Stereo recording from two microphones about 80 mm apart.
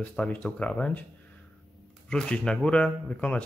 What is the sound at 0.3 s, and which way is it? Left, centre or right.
Speech, centre.